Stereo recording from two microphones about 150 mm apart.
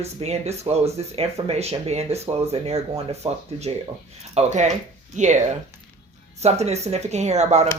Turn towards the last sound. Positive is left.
turn(degrees=-50)  # may be behind; listen again after turning